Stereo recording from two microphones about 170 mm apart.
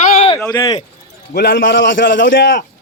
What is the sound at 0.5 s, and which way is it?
Mantra, 25° left (ahead or behind).